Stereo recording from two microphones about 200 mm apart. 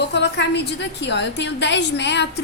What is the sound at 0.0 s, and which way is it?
A woman's voice, 60° left (ahead or behind).